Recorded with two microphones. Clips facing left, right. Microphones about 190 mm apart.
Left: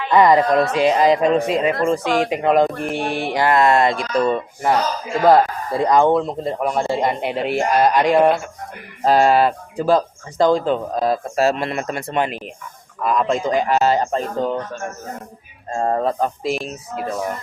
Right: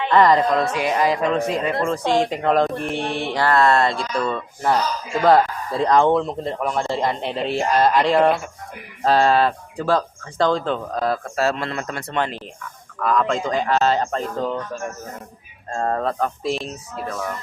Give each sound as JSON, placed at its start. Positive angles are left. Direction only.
{"t": 0.1, "sound": "speech", "side_deg": 10}
{"t": 0.5, "sound": "speech", "side_deg": 25}
{"t": 2.0, "sound": "speech", "side_deg": -25}
{"t": 2.3, "sound": "speech", "side_deg": 10}
{"t": 8.1, "sound": "speech", "side_deg": 0}
{"t": 9.0, "sound": "speech", "side_deg": 10}
{"t": 15.7, "sound": "speech", "side_deg": 15}